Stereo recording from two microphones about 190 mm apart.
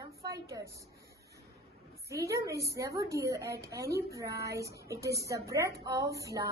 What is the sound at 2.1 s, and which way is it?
A woman's voice, 15° right (ahead or behind).